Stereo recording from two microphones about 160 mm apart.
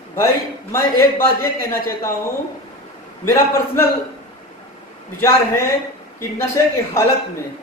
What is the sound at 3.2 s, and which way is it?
Speech, 15° left (ahead or behind).